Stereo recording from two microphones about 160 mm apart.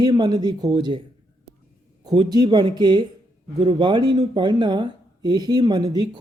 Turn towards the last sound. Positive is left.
turn(degrees=-25)  # may be behind; listen again after turning